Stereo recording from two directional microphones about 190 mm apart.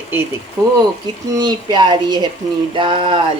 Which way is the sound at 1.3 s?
20° right (ahead or behind).